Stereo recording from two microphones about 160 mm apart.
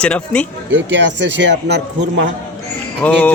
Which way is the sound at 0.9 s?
90° right.